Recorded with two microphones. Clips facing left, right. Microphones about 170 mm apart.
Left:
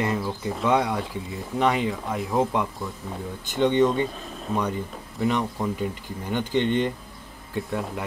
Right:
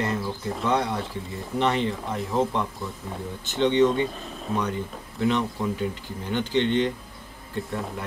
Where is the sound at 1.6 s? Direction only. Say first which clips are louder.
Left 1 dB; 10° left (ahead or behind).